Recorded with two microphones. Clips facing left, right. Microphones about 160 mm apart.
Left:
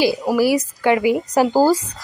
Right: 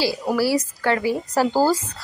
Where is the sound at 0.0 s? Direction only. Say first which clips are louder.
Left 4 dB; 20° left (ahead or behind).